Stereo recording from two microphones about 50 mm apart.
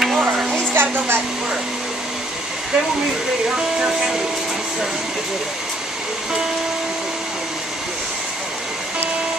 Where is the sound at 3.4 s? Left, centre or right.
Centre.